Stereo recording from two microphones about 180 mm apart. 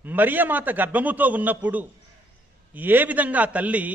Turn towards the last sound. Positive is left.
turn(degrees=-10)  # may be behind; listen again after turning